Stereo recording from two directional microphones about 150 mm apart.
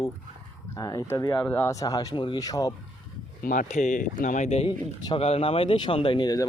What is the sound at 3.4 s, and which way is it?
A man's voice, 60° left (ahead or behind).